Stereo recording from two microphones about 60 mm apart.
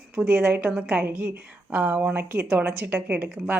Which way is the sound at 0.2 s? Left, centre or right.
Right.